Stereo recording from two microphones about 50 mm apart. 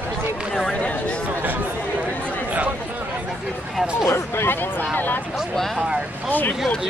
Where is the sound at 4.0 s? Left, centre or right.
Left.